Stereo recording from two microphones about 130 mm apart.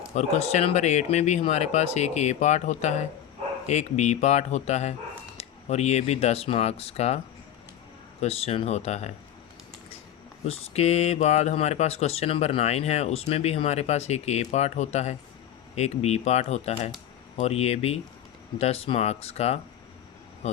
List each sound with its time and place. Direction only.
0.1 s speech: 55° left (ahead or behind)
8.2 s speech: 50° left (ahead or behind)
10.4 s speech: 55° left (ahead or behind)